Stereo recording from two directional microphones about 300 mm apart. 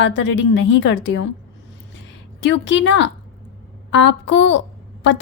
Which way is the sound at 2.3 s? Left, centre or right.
Left.